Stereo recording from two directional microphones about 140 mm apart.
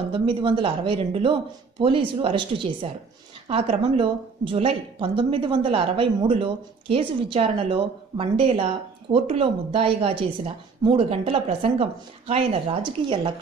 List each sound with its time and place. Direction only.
0.1 s speech: 35° right (ahead or behind)